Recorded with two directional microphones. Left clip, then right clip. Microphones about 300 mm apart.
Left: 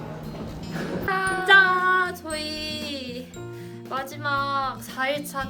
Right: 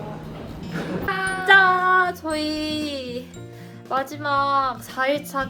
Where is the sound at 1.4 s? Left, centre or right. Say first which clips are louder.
Right 2 dB; centre.